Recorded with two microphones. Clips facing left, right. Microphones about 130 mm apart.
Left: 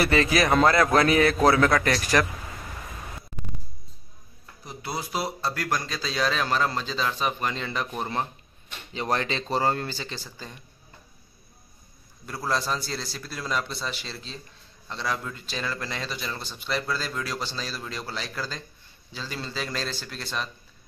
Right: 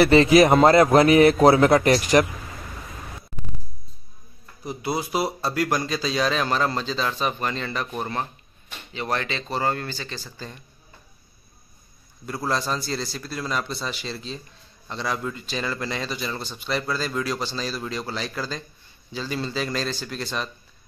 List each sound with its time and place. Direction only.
0.0 s a man's voice: 25° right (ahead or behind)
4.6 s speech: 10° right (ahead or behind); by 8.3 s 20° left (ahead or behind)
8.9 s speech: 30° left (ahead or behind)
12.4 s speech: 5° left (ahead or behind)